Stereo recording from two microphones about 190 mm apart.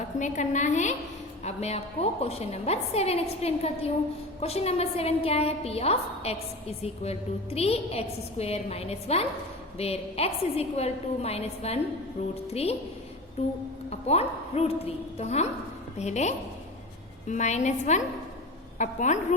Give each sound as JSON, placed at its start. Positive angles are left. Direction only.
{"t": 0.2, "sound": "a woman's voice", "side_deg": 40}